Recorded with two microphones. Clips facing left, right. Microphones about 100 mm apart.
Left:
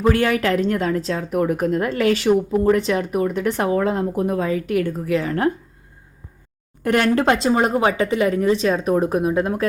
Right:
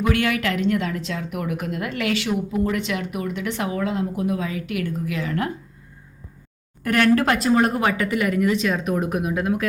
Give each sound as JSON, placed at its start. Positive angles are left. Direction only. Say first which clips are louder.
{"t": 0.0, "sound": "a woman's voice", "louder": "left 4 dB", "side_deg": 35}
{"t": 6.8, "sound": "speech", "louder": "left 1 dB", "side_deg": 25}